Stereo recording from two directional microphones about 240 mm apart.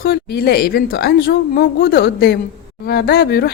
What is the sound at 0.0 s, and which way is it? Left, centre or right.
A woman's voice, left.